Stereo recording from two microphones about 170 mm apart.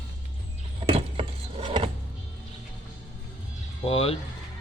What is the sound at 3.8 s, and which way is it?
Speech, 35° left (ahead or behind).